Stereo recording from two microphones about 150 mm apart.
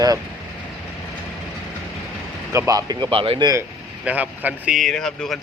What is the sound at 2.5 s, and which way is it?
Speech, 25° right (ahead or behind).